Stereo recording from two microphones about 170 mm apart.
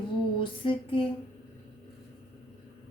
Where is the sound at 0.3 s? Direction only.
30° left (ahead or behind).